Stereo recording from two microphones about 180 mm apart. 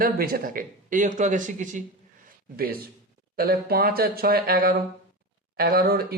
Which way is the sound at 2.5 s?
55° right (ahead or behind).